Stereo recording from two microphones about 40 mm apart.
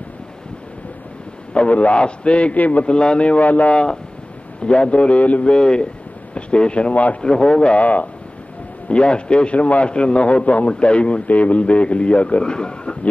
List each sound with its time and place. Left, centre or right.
1.5 s a man's voice: left
2.5 s a man's voice: left
2.8 s a man's voice: left
3.7 s a man's voice: left
5.5 s a man's voice: left
7.2 s a man's voice: left
7.8 s a man's voice: left
8.8 s a man's voice: left